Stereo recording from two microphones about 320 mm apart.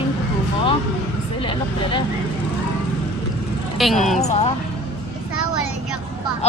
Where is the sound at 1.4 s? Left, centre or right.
Centre.